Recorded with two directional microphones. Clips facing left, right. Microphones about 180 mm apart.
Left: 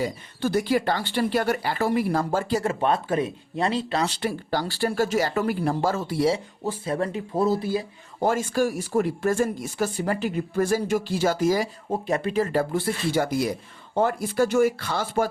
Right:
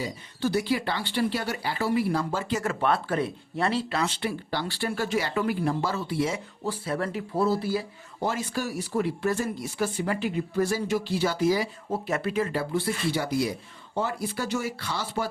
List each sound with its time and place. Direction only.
0.0 s speech: 50° left (ahead or behind)
2.8 s speech: 15° left (ahead or behind)
3.9 s speech: 35° left (ahead or behind)
6.8 s speech: 25° left (ahead or behind)
8.2 s speech: 50° left (ahead or behind)
11.9 s speech: 25° left (ahead or behind)
12.3 s speech: 40° left (ahead or behind)